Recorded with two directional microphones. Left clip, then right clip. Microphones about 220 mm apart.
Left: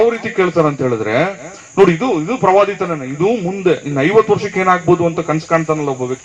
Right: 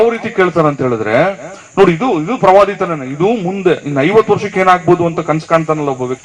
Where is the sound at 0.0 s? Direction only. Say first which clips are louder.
Right 2 dB; 30° right (ahead or behind).